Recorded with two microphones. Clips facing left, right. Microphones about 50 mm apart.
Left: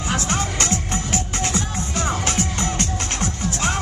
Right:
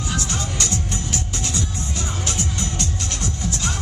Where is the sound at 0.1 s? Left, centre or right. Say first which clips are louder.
Left 6 dB; left.